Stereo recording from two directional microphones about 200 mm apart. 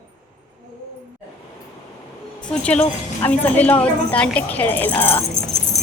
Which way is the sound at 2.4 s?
5° left (ahead or behind).